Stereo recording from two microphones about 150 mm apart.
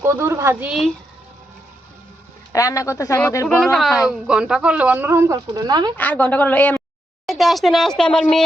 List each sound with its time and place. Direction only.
0.0 s speech: 15° right (ahead or behind)
2.5 s a man's voice: 20° left (ahead or behind)
3.6 s speech: centre (ahead or behind); by 5.9 s 25° right (ahead or behind)
6.0 s a woman's voice: 15° left (ahead or behind)
7.3 s speech: centre (ahead or behind)